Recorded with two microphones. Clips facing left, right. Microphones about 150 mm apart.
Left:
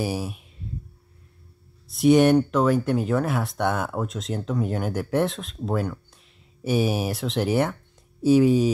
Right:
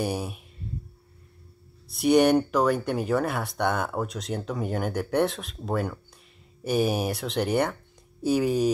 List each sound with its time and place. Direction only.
0.0 s speech: centre (ahead or behind)
1.9 s speech: centre (ahead or behind)